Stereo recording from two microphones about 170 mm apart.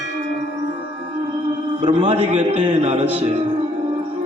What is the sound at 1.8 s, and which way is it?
A man's voice, 30° right (ahead or behind).